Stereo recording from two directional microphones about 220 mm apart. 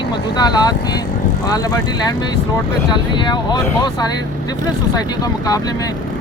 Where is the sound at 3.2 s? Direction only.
20° left (ahead or behind).